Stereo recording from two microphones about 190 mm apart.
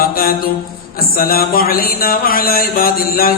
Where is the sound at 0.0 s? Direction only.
50° left (ahead or behind).